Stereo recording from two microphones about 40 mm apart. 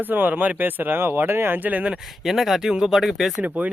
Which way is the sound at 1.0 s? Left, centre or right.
Right.